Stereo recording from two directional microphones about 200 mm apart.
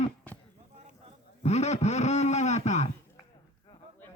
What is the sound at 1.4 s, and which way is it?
A man's voice, 35° left (ahead or behind).